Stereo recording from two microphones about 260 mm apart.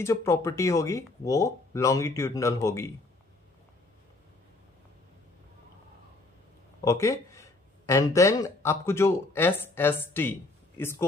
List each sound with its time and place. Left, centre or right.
0.0 s speech: centre
6.8 s speech: centre